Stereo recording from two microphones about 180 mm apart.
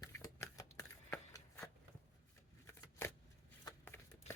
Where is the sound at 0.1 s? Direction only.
15° left (ahead or behind).